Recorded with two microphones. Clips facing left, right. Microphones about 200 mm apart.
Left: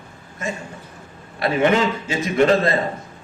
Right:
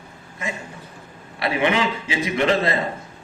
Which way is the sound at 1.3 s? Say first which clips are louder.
Left 3 dB; 45° left (ahead or behind).